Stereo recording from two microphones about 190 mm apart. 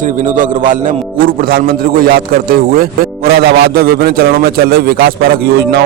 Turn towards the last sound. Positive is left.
turn(degrees=-55)  # may be behind; listen again after turning